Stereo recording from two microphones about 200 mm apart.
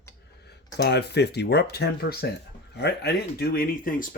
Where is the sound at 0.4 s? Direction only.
55° left (ahead or behind).